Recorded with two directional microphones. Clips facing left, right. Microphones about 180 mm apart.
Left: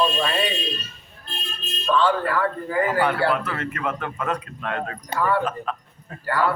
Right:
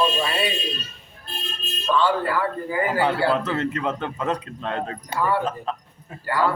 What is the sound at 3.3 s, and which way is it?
Speech, 25° right (ahead or behind).